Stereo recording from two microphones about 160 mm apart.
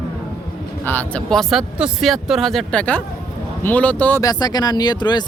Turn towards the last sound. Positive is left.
turn(degrees=25)  # may be behind; listen again after turning